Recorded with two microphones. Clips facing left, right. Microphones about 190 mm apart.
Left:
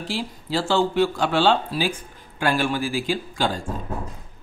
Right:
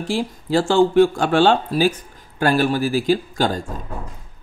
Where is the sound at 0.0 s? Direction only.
50° right (ahead or behind).